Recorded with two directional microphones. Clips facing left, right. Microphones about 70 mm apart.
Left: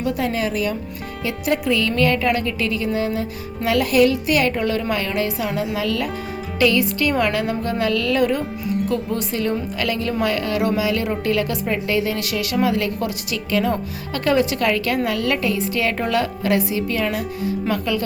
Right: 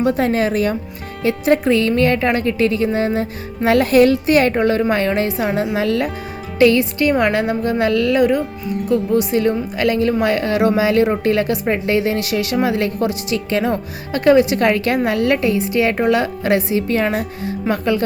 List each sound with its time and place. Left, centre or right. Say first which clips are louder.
0.0 s a woman's voice: right 6 dB; right
8.2 s a woman's voice: right 4 dB; centre; by 18.0 s right